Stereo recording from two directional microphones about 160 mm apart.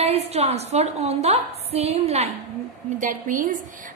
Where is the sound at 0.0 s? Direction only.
40° right (ahead or behind).